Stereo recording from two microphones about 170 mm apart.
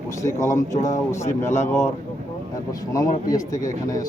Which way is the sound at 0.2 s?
20° left (ahead or behind).